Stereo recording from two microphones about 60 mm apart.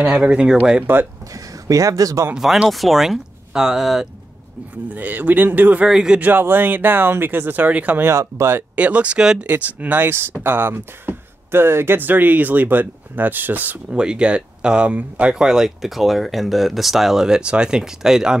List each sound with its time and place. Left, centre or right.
0.0 s speech: centre
1.3 s speech: right
2.3 s speech: centre
4.9 s speech: right
5.9 s speech: centre
6.1 s speech: right
8.0 s speech: right
8.7 s speech: right
9.5 s speech: right
10.0 s speech: right
13.8 s speech: centre